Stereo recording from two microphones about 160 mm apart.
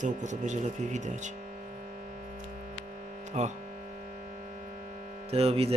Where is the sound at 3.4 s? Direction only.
45° right (ahead or behind).